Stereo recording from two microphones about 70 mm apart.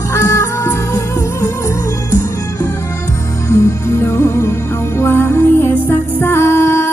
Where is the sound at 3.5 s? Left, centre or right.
Left.